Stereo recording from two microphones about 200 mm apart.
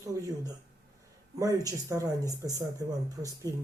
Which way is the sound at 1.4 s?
15° right (ahead or behind).